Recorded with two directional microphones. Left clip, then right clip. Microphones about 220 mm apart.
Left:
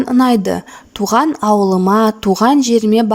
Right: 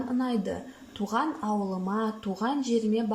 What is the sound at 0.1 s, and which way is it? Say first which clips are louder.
Speech: left 18 dB; 45° left (ahead or behind).